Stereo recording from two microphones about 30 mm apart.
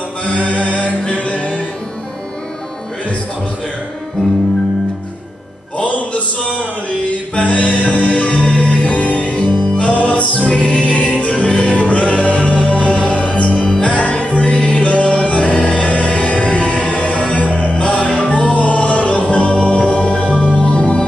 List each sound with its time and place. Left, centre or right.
0.2 s music: left
5.8 s music: left
7.3 s music: left
11.7 s music: left
13.0 s music: left
13.7 s music: left
13.9 s music: left
19.3 s music: left